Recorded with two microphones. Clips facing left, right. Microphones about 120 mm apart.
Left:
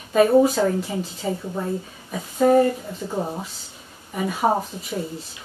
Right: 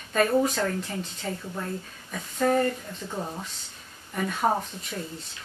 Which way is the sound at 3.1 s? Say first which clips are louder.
Left 6 dB; 25° left (ahead or behind).